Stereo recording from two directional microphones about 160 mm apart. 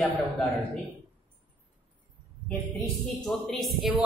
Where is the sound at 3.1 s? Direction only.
Centre (ahead or behind).